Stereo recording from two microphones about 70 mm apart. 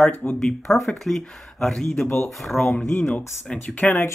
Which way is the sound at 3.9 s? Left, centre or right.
Left.